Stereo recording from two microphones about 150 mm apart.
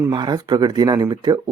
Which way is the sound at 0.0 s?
30° right (ahead or behind).